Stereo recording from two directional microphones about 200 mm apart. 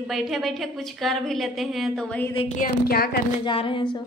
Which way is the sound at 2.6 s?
50° left (ahead or behind).